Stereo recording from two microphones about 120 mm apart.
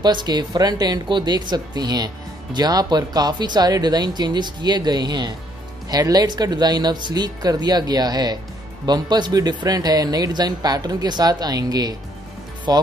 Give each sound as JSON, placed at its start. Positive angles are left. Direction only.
{"t": 0.0, "sound": "speech", "side_deg": -35}